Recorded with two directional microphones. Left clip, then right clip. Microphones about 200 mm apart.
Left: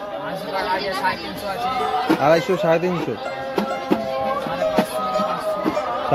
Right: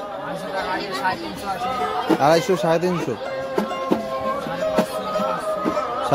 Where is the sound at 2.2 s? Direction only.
15° right (ahead or behind).